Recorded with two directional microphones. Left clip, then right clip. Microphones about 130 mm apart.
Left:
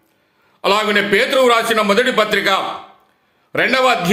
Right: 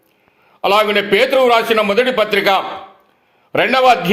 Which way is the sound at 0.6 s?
20° right (ahead or behind).